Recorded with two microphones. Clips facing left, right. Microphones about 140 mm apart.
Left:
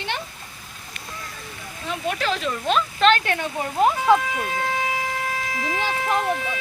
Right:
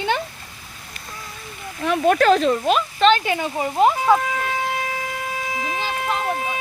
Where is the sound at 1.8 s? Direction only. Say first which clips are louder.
Right 10 dB; 55° right (ahead or behind); by 2.6 s 40° right (ahead or behind).